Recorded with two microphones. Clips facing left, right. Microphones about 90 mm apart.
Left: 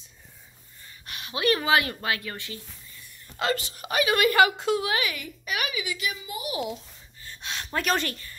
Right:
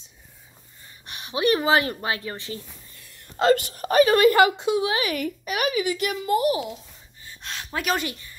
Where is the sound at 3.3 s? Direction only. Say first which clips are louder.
Right 8 dB; 40° right (ahead or behind).